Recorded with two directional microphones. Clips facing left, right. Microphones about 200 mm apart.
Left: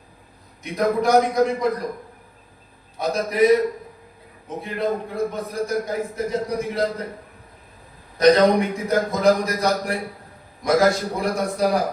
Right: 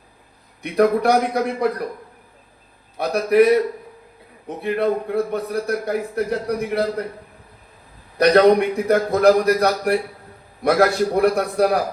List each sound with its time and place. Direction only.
0.6 s a man's voice: 65° right (ahead or behind)
3.0 s a man's voice: 60° right (ahead or behind)
8.2 s a man's voice: 60° right (ahead or behind)